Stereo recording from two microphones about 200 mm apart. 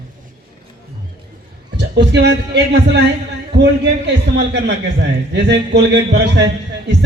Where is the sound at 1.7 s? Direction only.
55° right (ahead or behind).